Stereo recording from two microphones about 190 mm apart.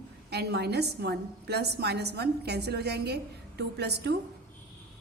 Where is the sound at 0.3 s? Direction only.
60° right (ahead or behind).